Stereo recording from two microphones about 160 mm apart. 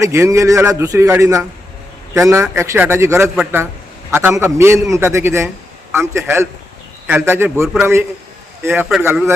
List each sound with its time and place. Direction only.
0.0 s a man's voice: 20° right (ahead or behind)